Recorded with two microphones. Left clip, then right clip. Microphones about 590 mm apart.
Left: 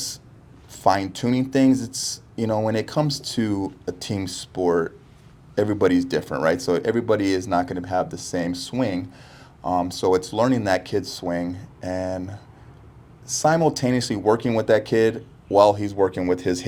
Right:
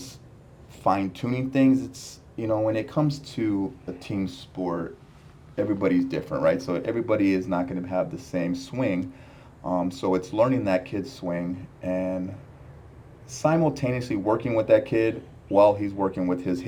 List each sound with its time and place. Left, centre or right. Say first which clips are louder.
0.9 s speech: left 4 dB; centre
13.2 s speech: left 4 dB; left